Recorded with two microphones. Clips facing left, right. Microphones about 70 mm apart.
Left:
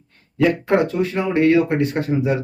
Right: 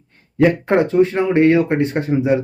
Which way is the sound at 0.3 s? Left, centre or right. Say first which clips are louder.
Right 2 dB; right.